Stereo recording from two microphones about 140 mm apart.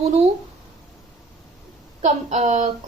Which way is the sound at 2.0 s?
55° right (ahead or behind).